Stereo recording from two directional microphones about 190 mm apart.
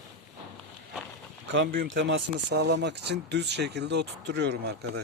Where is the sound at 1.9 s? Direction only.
75° right (ahead or behind).